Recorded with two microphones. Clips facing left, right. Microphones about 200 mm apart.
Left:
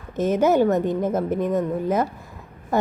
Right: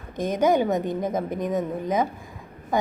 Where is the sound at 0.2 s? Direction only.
5° left (ahead or behind).